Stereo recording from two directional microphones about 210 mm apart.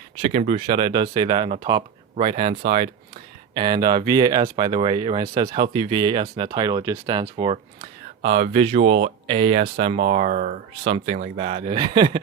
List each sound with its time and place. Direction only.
0.2 s speech: 30° right (ahead or behind)